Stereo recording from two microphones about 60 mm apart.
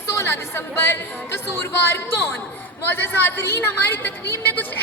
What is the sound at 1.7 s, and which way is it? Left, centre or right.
A woman's voice, left.